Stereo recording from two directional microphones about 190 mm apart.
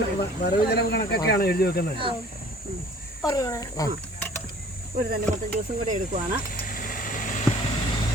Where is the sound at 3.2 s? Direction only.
15° left (ahead or behind).